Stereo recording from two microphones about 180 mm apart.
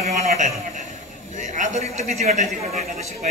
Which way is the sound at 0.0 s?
35° right (ahead or behind).